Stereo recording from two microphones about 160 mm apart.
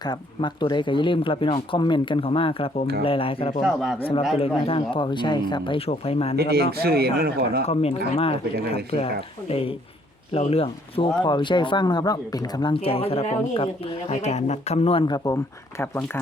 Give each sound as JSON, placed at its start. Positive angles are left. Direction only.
{"t": 0.0, "sound": "speech", "side_deg": 25}
{"t": 3.6, "sound": "speech", "side_deg": 0}
{"t": 4.4, "sound": "speech", "side_deg": 35}
{"t": 6.3, "sound": "speech", "side_deg": -80}
{"t": 7.6, "sound": "speech", "side_deg": 40}